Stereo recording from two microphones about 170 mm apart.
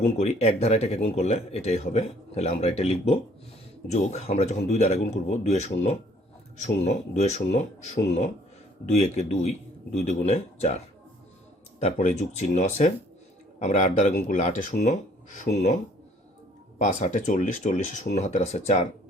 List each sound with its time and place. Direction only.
0.2 s speech: 40° left (ahead or behind)
8.9 s speech: 40° left (ahead or behind)
11.9 s speech: 45° left (ahead or behind)